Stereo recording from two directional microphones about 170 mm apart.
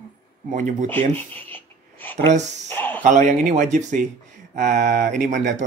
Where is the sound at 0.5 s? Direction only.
45° right (ahead or behind).